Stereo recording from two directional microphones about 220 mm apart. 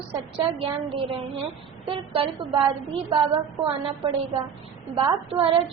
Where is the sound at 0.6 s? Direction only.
25° right (ahead or behind).